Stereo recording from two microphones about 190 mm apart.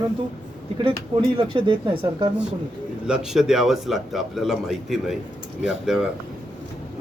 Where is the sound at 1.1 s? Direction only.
25° right (ahead or behind).